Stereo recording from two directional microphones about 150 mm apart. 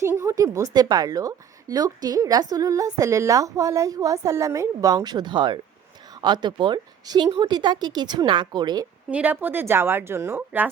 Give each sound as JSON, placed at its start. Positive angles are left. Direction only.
{"t": 0.0, "sound": "a woman's voice", "side_deg": -20}
{"t": 9.0, "sound": "a woman's voice", "side_deg": -10}